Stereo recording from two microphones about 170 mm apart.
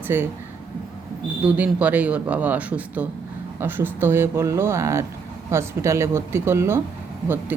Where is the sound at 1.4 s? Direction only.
10° right (ahead or behind).